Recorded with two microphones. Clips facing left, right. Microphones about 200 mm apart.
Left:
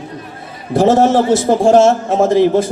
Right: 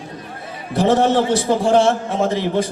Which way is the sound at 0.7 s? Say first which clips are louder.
Left 5 dB; 45° left (ahead or behind).